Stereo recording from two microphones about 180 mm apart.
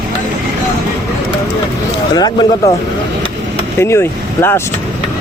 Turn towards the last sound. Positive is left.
turn(degrees=15)  # may be behind; listen again after turning